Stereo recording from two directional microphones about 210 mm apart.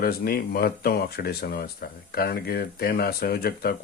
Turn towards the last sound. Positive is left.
turn(degrees=45)  # may be behind; listen again after turning